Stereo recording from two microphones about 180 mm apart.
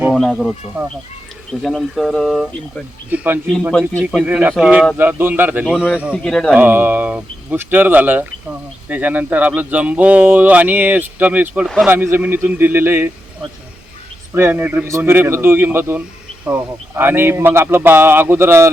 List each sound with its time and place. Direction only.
0.1 s speech: centre (ahead or behind)
1.6 s speech: centre (ahead or behind)
3.1 s speech: 10° right (ahead or behind)
3.7 s speech: 5° left (ahead or behind)
4.0 s speech: 5° right (ahead or behind)
6.2 s speech: 5° left (ahead or behind)
6.6 s speech: 10° right (ahead or behind)